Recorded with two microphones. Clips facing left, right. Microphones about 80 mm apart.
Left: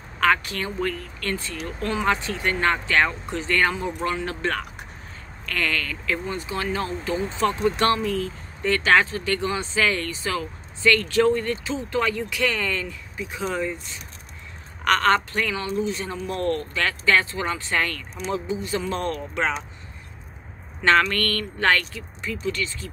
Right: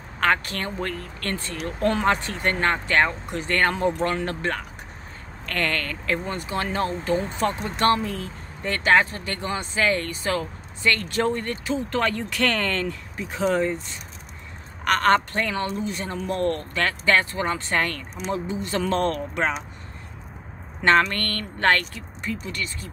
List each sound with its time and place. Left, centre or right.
0.5 s speech: right
5.5 s speech: right
15.0 s speech: right
18.7 s speech: right
20.8 s speech: right